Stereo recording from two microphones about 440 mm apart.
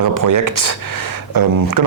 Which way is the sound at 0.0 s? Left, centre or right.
Right.